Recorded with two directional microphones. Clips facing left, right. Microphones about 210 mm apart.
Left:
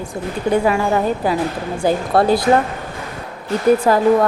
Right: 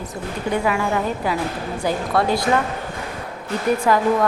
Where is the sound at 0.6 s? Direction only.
35° left (ahead or behind).